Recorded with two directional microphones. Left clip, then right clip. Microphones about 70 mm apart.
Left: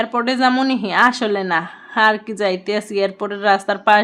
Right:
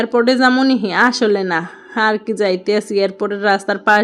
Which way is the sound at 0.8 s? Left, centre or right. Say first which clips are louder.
Right 1 dB; right.